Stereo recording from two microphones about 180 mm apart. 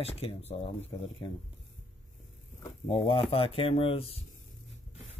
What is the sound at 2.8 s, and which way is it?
Speech, 30° left (ahead or behind).